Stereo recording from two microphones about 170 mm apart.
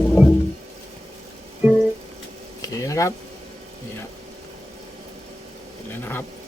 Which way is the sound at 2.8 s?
15° left (ahead or behind).